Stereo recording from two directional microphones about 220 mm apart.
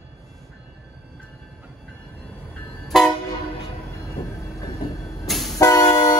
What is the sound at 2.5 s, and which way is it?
Vehicle, centre (ahead or behind).